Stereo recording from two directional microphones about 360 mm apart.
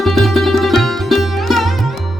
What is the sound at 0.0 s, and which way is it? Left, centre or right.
Music, centre.